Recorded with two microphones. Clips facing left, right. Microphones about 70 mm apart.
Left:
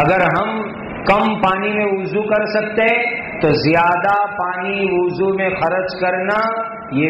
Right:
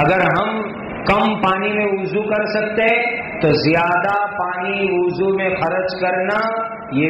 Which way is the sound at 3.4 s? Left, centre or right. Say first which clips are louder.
Left 1 dB; left.